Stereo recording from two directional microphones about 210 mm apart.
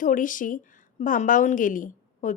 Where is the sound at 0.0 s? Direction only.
40° left (ahead or behind).